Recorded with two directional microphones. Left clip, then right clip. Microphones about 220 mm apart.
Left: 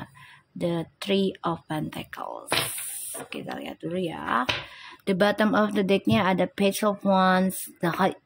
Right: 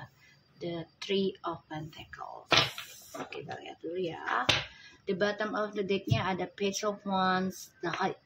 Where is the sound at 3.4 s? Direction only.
50° left (ahead or behind).